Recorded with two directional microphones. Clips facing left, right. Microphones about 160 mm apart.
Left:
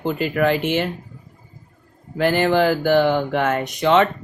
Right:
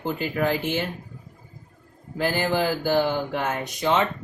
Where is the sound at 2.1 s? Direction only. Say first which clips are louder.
Left 6 dB; 65° left (ahead or behind).